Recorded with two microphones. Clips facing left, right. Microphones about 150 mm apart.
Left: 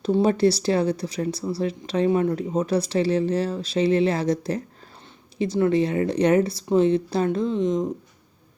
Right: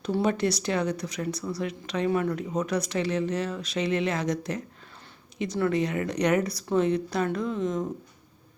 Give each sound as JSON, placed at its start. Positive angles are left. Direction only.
{"t": 0.1, "sound": "speech", "side_deg": 30}